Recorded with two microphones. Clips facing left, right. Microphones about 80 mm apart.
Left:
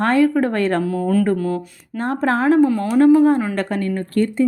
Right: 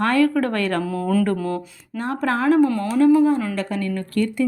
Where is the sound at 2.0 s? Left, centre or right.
Left.